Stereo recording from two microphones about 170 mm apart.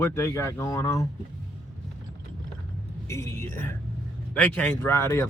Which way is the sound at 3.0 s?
15° left (ahead or behind).